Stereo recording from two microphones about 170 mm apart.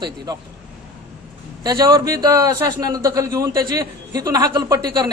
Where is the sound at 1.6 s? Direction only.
20° right (ahead or behind).